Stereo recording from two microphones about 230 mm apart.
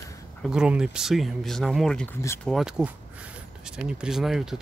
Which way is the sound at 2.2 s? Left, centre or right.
Centre.